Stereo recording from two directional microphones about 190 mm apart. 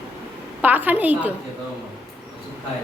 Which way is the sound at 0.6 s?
10° right (ahead or behind).